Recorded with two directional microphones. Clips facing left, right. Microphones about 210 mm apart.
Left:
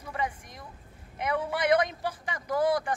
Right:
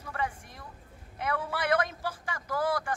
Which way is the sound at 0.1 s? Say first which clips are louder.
Left 1 dB; 15° left (ahead or behind).